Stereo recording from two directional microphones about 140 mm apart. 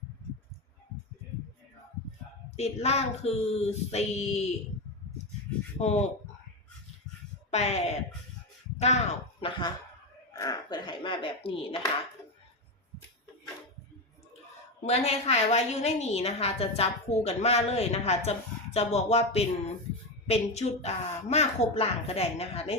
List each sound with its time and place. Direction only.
2.6 s a woman's voice: 50° left (ahead or behind)
5.8 s a woman's voice: 50° left (ahead or behind)
7.5 s a woman's voice: 50° left (ahead or behind)
10.3 s speech: 25° left (ahead or behind)
14.8 s a woman's voice: 50° left (ahead or behind)